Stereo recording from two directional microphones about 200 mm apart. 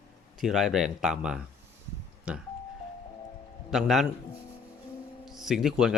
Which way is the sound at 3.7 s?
Centre (ahead or behind).